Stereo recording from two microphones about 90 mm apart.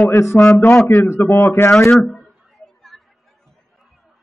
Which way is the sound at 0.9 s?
25° left (ahead or behind).